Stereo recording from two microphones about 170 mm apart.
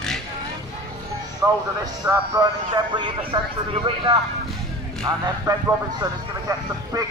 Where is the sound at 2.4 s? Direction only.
30° right (ahead or behind).